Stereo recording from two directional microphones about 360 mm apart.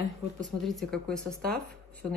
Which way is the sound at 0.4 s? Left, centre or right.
Centre.